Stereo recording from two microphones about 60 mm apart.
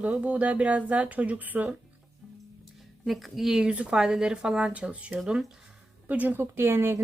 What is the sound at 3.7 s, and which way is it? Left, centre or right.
Speech, centre.